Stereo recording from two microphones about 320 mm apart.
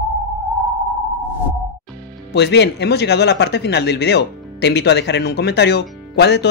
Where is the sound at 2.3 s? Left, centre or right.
Left.